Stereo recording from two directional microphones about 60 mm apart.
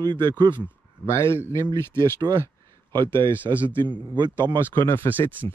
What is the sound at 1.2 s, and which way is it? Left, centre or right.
Speech, left.